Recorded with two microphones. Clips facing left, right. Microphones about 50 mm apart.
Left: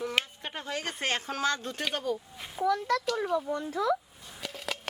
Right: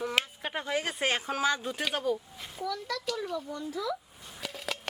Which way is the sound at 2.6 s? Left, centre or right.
Left.